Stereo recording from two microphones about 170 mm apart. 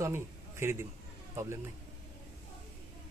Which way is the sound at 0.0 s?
15° right (ahead or behind).